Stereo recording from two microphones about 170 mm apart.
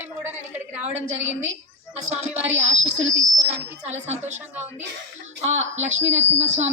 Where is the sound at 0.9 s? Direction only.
40° right (ahead or behind).